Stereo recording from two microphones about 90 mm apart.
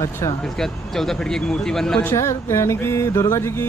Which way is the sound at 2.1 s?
30° left (ahead or behind).